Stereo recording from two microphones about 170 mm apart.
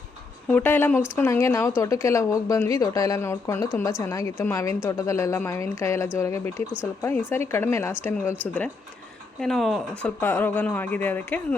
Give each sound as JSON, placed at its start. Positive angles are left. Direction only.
{"t": 0.4, "sound": "a woman's voice", "side_deg": 10}
{"t": 9.4, "sound": "speech", "side_deg": 0}
{"t": 10.2, "sound": "speech", "side_deg": 10}